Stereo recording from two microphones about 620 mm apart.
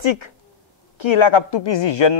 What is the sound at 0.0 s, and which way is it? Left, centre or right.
A man's voice, left.